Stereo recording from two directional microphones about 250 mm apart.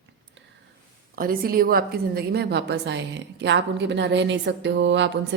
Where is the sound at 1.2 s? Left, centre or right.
Right.